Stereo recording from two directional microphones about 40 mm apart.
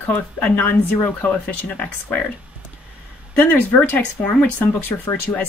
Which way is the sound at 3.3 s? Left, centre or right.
Left.